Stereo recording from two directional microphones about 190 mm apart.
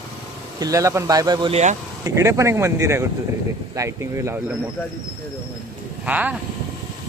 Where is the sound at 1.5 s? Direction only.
40° right (ahead or behind).